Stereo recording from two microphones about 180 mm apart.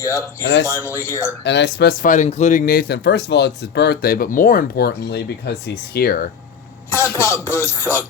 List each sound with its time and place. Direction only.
0.0 s music: 15° left (ahead or behind)
1.5 s speech: 70° left (ahead or behind); by 6.3 s 50° left (ahead or behind)
6.9 s music: 15° left (ahead or behind)